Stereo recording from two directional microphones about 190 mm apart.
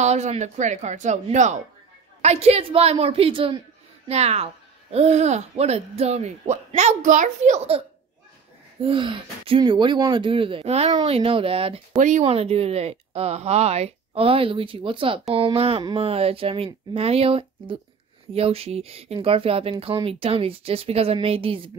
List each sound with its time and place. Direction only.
0.0 s speech: 35° right (ahead or behind)
8.8 s speech: 25° right (ahead or behind)